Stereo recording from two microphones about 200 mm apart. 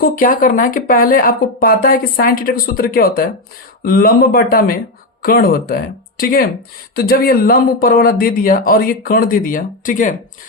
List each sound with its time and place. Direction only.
0.0 s speech: 45° left (ahead or behind)